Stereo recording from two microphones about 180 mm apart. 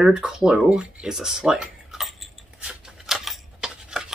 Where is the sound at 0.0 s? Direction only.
5° right (ahead or behind).